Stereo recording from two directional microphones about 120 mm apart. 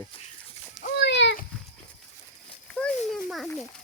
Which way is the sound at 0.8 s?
90° left.